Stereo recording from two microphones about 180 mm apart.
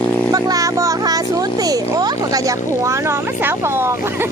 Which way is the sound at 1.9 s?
20° right (ahead or behind).